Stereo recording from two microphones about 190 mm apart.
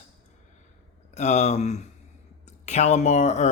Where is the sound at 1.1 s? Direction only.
35° left (ahead or behind).